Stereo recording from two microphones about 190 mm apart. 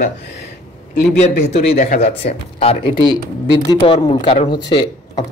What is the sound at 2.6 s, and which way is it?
Speech, 30° left (ahead or behind).